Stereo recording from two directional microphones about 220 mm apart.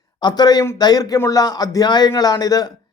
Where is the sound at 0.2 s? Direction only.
20° left (ahead or behind).